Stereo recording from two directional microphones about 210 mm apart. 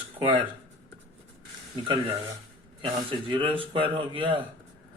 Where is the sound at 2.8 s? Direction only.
20° right (ahead or behind).